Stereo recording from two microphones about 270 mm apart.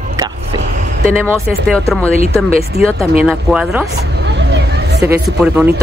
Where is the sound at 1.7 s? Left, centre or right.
Centre.